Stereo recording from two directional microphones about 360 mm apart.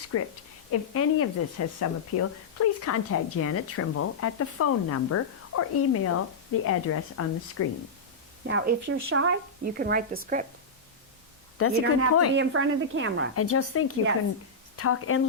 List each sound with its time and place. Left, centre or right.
0.1 s a woman's voice: left
8.4 s a woman's voice: right
11.5 s speech: left
12.3 s a woman's voice: right
13.3 s speech: left